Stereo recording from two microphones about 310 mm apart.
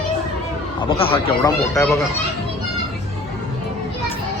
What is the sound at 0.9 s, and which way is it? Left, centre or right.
Speech, centre.